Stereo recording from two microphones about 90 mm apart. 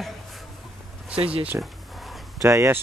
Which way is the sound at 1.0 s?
15° right (ahead or behind).